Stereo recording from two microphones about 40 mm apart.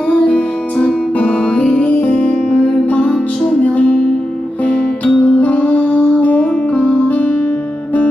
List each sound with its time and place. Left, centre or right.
0.1 s music: left
1.9 s music: left